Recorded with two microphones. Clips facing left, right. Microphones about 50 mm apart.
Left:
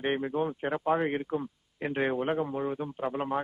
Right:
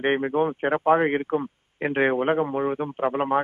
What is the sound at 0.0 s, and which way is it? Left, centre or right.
Speech, right.